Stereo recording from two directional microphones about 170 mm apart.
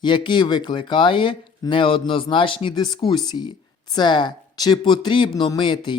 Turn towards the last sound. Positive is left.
turn(degrees=25)  # may be behind; listen again after turning